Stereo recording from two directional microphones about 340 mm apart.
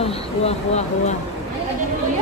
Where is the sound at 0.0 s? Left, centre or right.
Centre.